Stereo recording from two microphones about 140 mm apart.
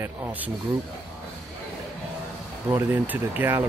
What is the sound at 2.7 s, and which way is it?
Speech, 15° right (ahead or behind).